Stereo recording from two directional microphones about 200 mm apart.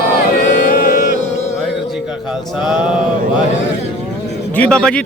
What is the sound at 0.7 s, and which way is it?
Music, 45° left (ahead or behind).